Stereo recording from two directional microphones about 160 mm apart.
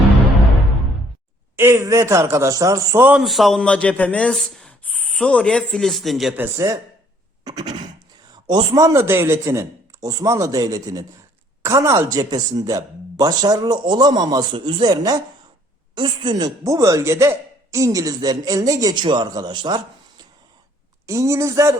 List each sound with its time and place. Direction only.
1.5 s a man's voice: 15° right (ahead or behind); by 6.3 s centre (ahead or behind)
6.3 s a man's voice: 15° right (ahead or behind)
7.4 s a sound: 25° right (ahead or behind)
8.4 s speech: 25° right (ahead or behind)